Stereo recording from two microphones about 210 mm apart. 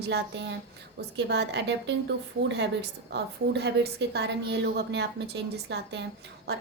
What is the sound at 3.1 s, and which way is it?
A woman's voice, 55° right (ahead or behind).